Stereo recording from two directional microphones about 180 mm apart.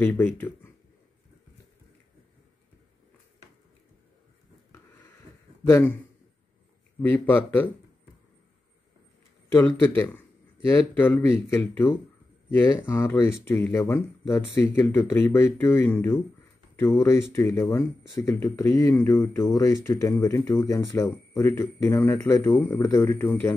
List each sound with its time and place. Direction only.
0.0 s speech: 10° left (ahead or behind)
5.7 s speech: 10° left (ahead or behind)
7.0 s speech: 10° left (ahead or behind)
9.5 s speech: 10° left (ahead or behind)